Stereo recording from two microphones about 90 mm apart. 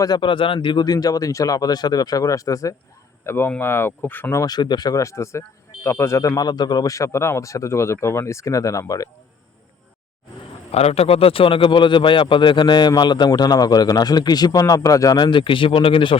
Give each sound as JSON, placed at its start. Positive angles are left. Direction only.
{"t": 0.2, "sound": "a man's voice", "side_deg": 70}
{"t": 3.2, "sound": "speech", "side_deg": 25}
{"t": 4.4, "sound": "a man's voice", "side_deg": 50}
{"t": 10.7, "sound": "a man's voice", "side_deg": 90}
{"t": 15.2, "sound": "speech", "side_deg": 65}